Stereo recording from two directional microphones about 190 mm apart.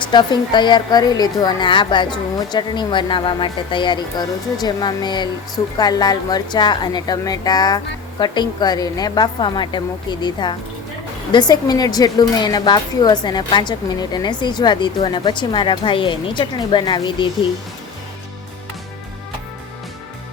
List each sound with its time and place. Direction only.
0.0 s speech: 25° left (ahead or behind)